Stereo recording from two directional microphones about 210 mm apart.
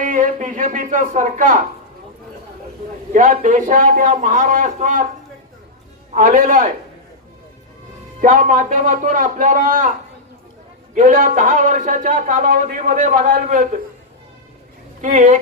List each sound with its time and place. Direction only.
0.0 s speech: 40° right (ahead or behind)
3.1 s a man's voice: 40° right (ahead or behind)
6.1 s a man's voice: 40° right (ahead or behind)
8.2 s a man's voice: 40° right (ahead or behind)
10.9 s a man's voice: 40° right (ahead or behind)
15.0 s a man's voice: 35° right (ahead or behind)